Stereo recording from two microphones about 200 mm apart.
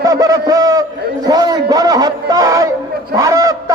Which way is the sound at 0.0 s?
15° right (ahead or behind).